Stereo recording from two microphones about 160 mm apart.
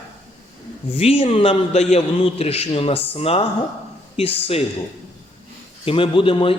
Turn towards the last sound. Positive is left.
turn(degrees=35)  # may be behind; listen again after turning